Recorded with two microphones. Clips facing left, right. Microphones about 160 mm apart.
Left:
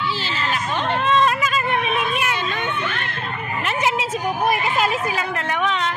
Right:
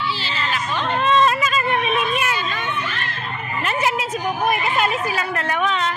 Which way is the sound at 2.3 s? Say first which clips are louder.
Left 1 dB; 60° left (ahead or behind).